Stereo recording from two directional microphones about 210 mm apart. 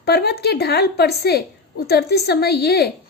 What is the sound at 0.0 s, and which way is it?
A woman's voice, 50° left (ahead or behind).